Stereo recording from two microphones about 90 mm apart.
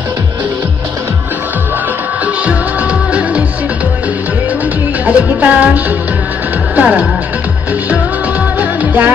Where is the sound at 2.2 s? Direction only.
15° right (ahead or behind).